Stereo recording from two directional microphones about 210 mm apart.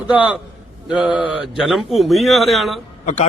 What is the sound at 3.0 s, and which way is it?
Speech, 35° left (ahead or behind).